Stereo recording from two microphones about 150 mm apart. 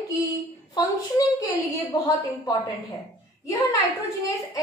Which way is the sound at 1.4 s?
20° left (ahead or behind).